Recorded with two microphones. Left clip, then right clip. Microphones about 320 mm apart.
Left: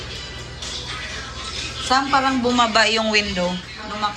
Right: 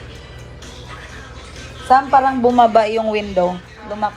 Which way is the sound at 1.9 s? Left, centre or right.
Centre.